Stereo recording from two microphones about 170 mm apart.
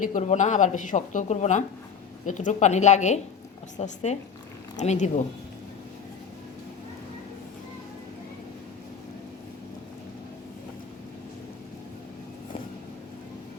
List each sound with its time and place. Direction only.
0.0 s speech: 45° left (ahead or behind)